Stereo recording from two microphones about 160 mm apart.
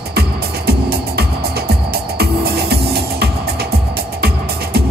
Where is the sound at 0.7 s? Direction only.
80° right.